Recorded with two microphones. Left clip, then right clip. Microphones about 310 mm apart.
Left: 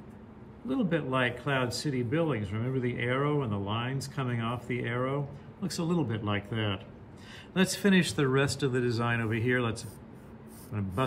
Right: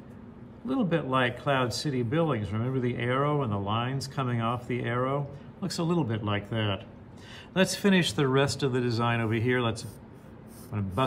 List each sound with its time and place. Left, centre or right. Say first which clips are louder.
0.7 s speech: right 2 dB; centre